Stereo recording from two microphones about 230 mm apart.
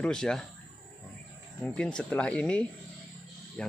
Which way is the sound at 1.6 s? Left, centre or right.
Centre.